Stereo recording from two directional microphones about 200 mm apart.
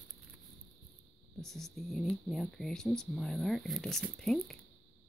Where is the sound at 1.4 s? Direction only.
Centre (ahead or behind).